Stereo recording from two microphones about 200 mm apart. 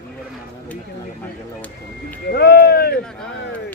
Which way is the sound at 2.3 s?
55° left (ahead or behind).